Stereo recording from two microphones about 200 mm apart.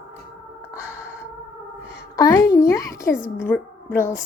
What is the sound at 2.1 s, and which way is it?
A woman's voice, 15° left (ahead or behind).